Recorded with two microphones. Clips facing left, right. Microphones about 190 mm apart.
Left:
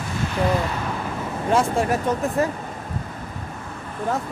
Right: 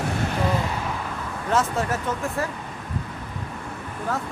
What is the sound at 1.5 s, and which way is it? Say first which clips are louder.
Speech: left 3 dB; 15° left (ahead or behind).